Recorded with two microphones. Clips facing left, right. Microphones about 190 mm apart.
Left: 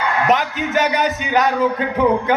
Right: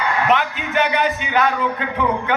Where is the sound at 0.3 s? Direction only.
40° left (ahead or behind).